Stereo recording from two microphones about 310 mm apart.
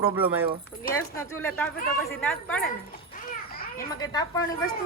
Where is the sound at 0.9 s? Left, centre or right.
Centre.